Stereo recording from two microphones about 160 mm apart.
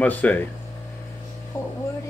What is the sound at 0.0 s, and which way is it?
Speech, 10° left (ahead or behind).